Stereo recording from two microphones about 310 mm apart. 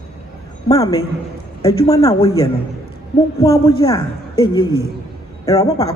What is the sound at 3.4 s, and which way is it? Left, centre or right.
Speech, centre.